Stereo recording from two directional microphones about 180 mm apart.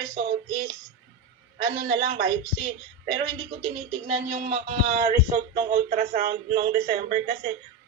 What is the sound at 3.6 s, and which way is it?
Speech, 40° right (ahead or behind).